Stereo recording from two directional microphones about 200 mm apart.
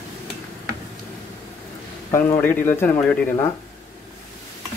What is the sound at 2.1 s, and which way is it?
Speech, 10° left (ahead or behind).